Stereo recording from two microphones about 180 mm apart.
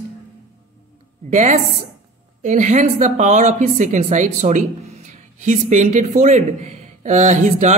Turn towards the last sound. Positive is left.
turn(degrees=-40)  # may be behind; listen again after turning